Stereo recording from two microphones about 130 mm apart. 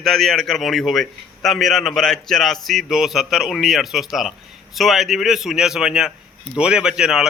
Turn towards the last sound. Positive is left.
turn(degrees=-5)  # may be behind; listen again after turning